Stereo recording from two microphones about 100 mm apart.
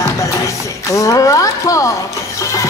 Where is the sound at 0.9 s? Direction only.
35° left (ahead or behind).